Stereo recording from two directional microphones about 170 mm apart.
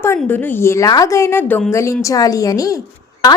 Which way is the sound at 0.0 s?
15° left (ahead or behind).